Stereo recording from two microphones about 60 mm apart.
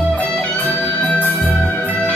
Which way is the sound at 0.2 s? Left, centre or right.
Left.